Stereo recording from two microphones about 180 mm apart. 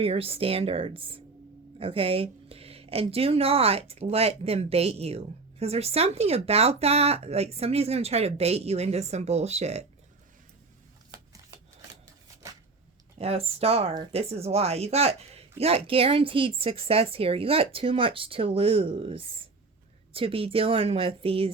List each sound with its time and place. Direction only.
0.0 s speech: 30° right (ahead or behind)
13.1 s speech: 35° right (ahead or behind)